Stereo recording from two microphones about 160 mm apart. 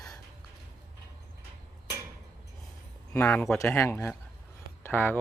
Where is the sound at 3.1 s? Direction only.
15° left (ahead or behind).